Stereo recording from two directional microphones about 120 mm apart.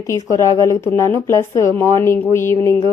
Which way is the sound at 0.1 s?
25° left (ahead or behind).